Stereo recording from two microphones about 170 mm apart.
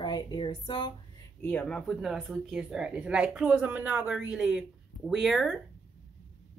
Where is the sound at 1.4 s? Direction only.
5° left (ahead or behind).